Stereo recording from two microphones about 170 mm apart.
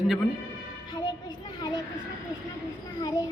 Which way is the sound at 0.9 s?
25° left (ahead or behind).